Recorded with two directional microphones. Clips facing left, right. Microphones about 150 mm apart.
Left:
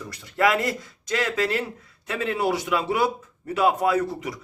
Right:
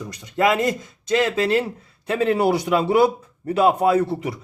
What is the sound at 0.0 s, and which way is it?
A man's voice, 20° right (ahead or behind).